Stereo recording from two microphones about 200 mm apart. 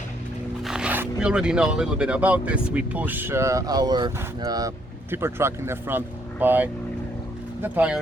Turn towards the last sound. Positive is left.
turn(degrees=-10)  # may be behind; listen again after turning